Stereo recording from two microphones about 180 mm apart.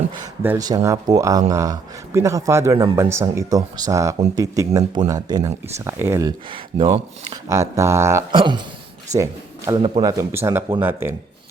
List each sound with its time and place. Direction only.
0.4 s a man's voice: 15° right (ahead or behind)
6.5 s speech: 30° right (ahead or behind)
7.4 s a man's voice: 15° right (ahead or behind)
8.3 s a man's voice: 25° right (ahead or behind)